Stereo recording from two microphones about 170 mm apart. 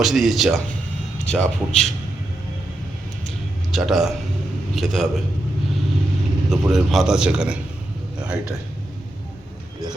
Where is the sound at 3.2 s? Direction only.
Centre (ahead or behind).